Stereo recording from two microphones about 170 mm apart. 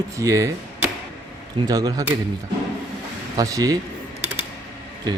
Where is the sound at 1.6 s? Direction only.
20° right (ahead or behind).